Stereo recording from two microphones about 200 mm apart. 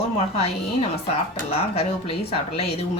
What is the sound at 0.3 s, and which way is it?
Speech, 30° left (ahead or behind).